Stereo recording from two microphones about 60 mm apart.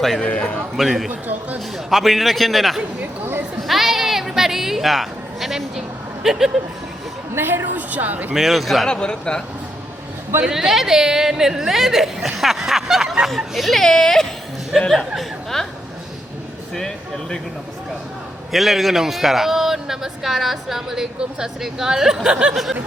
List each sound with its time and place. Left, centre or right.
0.2 s a man's voice: centre
0.8 s a man's voice: centre
3.6 s a sound: centre
6.3 s speech: centre
7.3 s a woman's voice: right
8.3 s a man's voice: centre
8.9 s speech: centre
10.4 s a man's voice: centre
16.7 s speech: centre
18.5 s speech: centre